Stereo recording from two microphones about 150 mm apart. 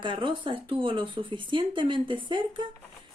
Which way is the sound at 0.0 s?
35° right (ahead or behind).